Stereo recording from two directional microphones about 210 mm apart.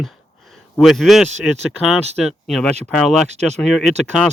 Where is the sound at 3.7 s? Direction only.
Centre (ahead or behind).